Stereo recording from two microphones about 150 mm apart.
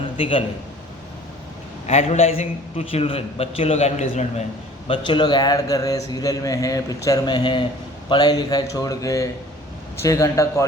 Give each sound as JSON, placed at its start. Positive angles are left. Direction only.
{"t": 0.2, "sound": "a man's voice", "side_deg": 35}
{"t": 1.9, "sound": "a man's voice", "side_deg": 45}
{"t": 4.9, "sound": "speech", "side_deg": 35}